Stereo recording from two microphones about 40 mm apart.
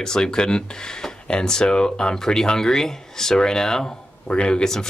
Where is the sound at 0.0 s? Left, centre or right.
Centre.